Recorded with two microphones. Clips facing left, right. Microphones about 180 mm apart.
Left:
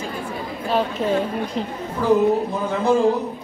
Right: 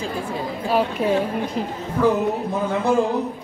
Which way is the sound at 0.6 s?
10° right (ahead or behind).